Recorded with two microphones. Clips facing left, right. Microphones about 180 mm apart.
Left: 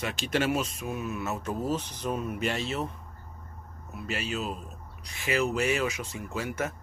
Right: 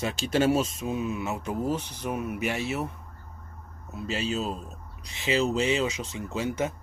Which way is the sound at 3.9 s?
25° right (ahead or behind).